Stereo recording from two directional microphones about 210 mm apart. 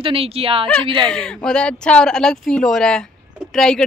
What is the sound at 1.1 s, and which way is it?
Speech, 5° left (ahead or behind).